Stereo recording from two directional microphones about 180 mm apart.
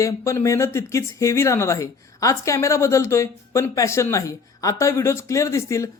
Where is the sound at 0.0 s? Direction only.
15° left (ahead or behind).